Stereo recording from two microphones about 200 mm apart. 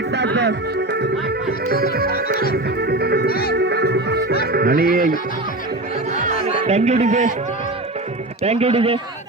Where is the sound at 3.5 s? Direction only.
55° right (ahead or behind).